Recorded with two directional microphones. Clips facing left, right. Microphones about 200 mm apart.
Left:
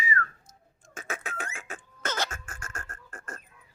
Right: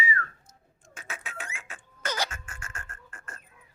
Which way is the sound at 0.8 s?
45° left (ahead or behind).